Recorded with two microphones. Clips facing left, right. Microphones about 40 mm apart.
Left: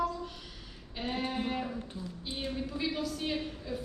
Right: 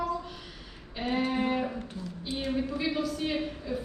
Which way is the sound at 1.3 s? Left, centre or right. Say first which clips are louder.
Right 6 dB; centre.